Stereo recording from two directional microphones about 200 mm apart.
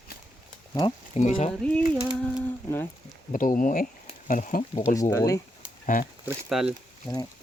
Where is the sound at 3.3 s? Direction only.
40° left (ahead or behind).